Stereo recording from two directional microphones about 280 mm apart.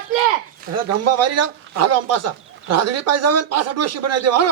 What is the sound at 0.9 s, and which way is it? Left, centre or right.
Speech, right.